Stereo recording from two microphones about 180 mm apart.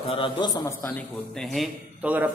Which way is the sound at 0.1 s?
25° left (ahead or behind).